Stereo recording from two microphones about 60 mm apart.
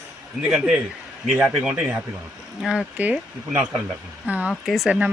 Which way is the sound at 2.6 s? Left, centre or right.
Centre.